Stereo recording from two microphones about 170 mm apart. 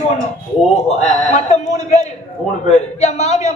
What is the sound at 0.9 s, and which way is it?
A man's voice, 40° left (ahead or behind).